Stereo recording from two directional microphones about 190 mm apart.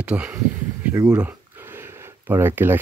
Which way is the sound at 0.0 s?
5° right (ahead or behind).